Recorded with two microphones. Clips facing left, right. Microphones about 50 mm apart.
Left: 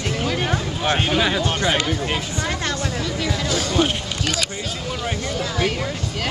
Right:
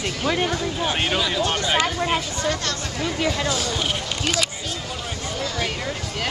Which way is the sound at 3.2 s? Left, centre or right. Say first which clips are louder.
Right 1 dB; right.